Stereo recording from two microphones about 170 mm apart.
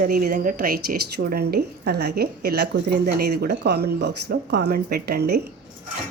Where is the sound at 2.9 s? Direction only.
65° right (ahead or behind).